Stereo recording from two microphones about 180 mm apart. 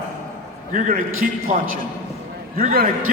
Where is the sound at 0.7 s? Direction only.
50° right (ahead or behind).